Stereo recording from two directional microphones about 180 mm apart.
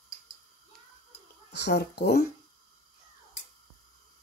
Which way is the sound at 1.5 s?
70° left (ahead or behind).